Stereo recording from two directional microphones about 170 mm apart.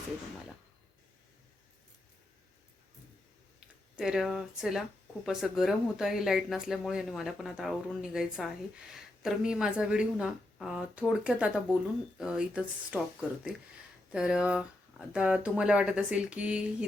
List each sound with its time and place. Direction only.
3.9 s speech: 5° right (ahead or behind)